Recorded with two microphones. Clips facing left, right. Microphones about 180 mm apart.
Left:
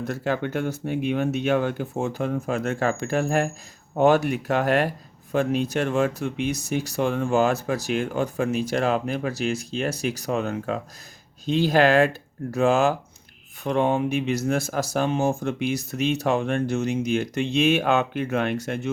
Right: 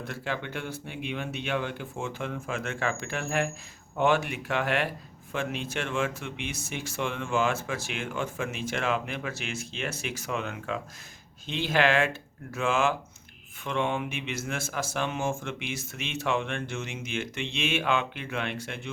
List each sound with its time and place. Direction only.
0.0 s speech: 45° left (ahead or behind)